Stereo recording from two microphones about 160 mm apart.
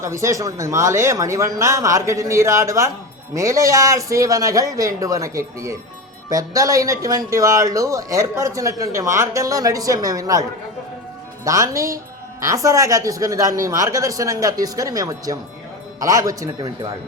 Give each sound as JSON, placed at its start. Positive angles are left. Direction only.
{"t": 0.0, "sound": "speech", "side_deg": -20}
{"t": 11.4, "sound": "speech", "side_deg": -20}